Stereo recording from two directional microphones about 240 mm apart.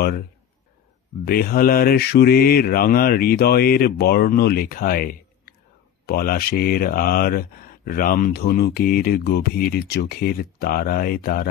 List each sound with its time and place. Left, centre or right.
1.2 s speech: left